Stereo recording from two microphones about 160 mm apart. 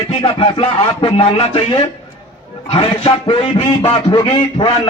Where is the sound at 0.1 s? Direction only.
35° left (ahead or behind).